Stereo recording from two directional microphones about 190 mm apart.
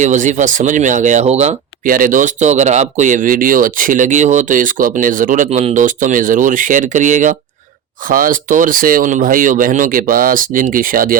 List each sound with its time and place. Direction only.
0.0 s speech: 40° right (ahead or behind)